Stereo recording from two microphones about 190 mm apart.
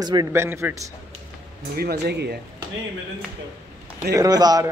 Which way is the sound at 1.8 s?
55° right (ahead or behind).